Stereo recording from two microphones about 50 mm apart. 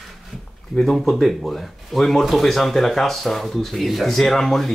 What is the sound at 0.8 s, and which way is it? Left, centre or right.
Speech, centre.